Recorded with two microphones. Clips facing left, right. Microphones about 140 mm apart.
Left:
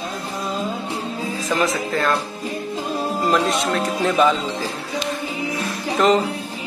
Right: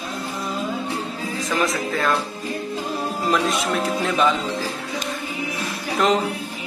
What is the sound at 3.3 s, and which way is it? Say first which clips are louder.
A man's voice: left 1 dB; centre (ahead or behind).